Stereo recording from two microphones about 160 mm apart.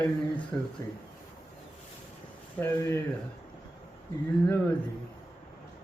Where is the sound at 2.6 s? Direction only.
15° left (ahead or behind).